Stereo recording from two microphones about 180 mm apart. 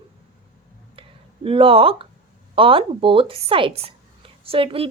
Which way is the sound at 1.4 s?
30° right (ahead or behind).